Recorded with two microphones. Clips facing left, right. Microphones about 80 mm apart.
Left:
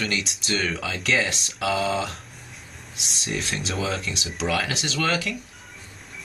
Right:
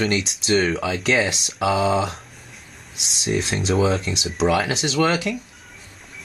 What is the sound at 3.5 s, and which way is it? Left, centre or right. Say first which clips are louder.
Speech: right 9 dB; centre.